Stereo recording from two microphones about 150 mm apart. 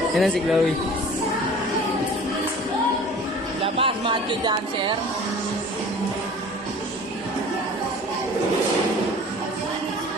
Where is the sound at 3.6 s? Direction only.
35° right (ahead or behind).